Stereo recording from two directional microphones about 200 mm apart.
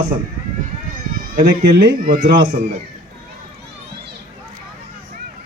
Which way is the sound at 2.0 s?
40° right (ahead or behind).